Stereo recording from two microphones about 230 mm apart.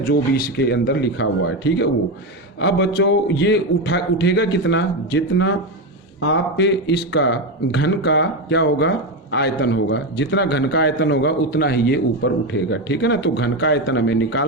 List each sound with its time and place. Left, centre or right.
0.1 s a man's voice: left